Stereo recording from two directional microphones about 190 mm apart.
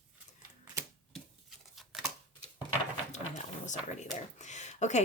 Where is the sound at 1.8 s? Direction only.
Centre (ahead or behind).